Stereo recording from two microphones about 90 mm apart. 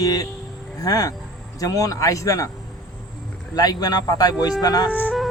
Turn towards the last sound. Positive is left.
turn(degrees=20)  # may be behind; listen again after turning